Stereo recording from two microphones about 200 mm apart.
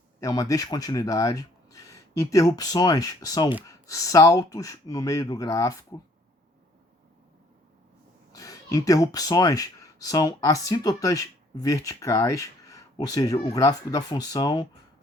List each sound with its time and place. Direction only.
0.2 s speech: 15° left (ahead or behind)
8.3 s speech: 15° left (ahead or behind)